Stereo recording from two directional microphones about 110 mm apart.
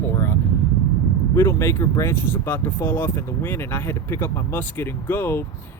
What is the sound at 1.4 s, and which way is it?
Speech, 25° left (ahead or behind).